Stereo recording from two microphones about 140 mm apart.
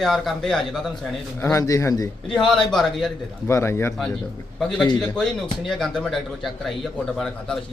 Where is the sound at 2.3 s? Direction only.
5° left (ahead or behind).